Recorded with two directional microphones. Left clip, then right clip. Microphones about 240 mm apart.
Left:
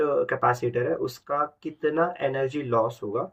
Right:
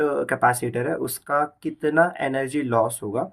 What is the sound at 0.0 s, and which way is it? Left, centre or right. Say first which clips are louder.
Speech: right 2 dB; right.